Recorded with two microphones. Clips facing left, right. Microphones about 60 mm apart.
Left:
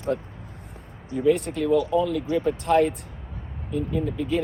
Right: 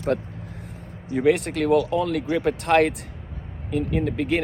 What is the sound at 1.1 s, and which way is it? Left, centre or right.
Speech, right.